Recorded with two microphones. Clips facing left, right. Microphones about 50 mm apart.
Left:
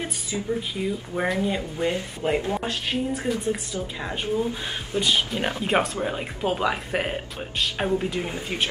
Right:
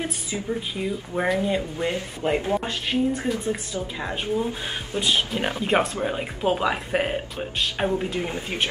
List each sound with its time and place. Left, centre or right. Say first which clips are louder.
0.0 s speech: right 1 dB; centre